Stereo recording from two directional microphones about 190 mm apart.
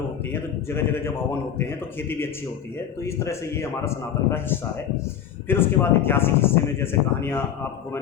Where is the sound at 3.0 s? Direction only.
15° left (ahead or behind).